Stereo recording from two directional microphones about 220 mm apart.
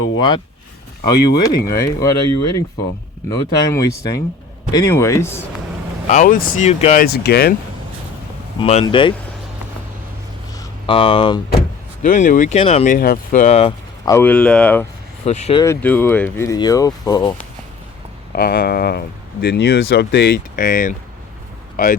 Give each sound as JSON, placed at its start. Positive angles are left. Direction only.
{"t": 0.2, "sound": "speech", "side_deg": 20}
{"t": 6.1, "sound": "speech", "side_deg": 35}
{"t": 8.6, "sound": "speech", "side_deg": 25}
{"t": 10.6, "sound": "a sound", "side_deg": 25}
{"t": 12.0, "sound": "speech", "side_deg": 35}
{"t": 15.2, "sound": "speech", "side_deg": 30}
{"t": 15.6, "sound": "speech", "side_deg": 10}
{"t": 18.3, "sound": "speech", "side_deg": 40}